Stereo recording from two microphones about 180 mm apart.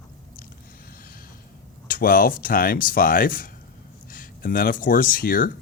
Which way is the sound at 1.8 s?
55° left (ahead or behind).